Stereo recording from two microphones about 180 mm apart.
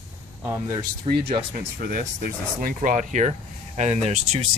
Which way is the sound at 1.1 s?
35° right (ahead or behind).